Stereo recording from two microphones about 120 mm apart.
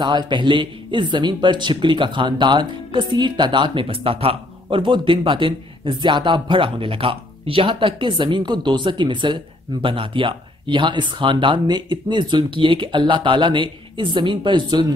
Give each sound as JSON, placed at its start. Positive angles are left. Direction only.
{"t": 0.0, "sound": "a man's voice", "side_deg": -40}